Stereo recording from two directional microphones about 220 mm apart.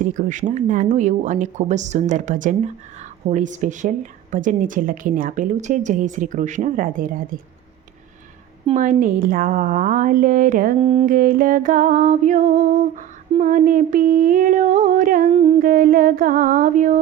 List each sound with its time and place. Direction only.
0.0 s a woman's voice: 35° right (ahead or behind)
8.6 s a woman's voice: 35° right (ahead or behind)
15.7 s a woman's voice: 40° right (ahead or behind)